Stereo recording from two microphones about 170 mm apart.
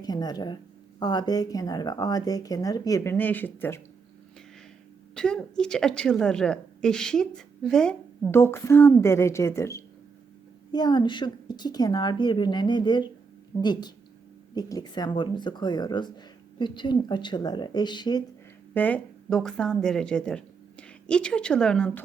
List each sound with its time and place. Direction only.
0.0 s speech: 25° left (ahead or behind)
5.1 s a woman's voice: 5° left (ahead or behind); by 18.2 s 25° left (ahead or behind)
18.7 s speech: 10° left (ahead or behind)